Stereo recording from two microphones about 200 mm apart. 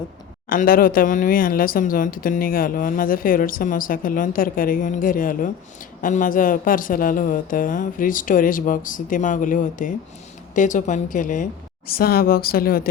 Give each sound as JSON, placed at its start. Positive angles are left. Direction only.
{"t": 0.5, "sound": "a woman's voice", "side_deg": 45}